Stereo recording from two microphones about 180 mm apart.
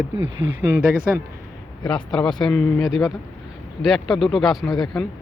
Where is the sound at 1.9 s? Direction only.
5° left (ahead or behind).